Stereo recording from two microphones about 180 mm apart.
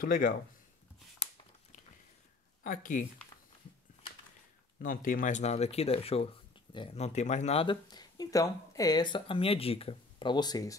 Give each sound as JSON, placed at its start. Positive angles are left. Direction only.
{"t": 0.0, "sound": "speech", "side_deg": 50}
{"t": 2.6, "sound": "speech", "side_deg": 50}
{"t": 4.7, "sound": "speech", "side_deg": 50}